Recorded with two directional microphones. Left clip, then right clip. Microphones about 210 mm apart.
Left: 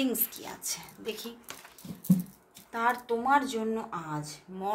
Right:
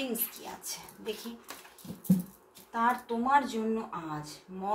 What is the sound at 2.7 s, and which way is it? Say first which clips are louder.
Speech: left 1 dB; 45° left (ahead or behind).